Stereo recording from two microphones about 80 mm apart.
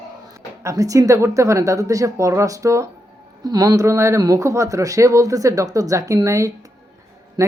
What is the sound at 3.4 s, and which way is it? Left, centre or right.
Speech, right.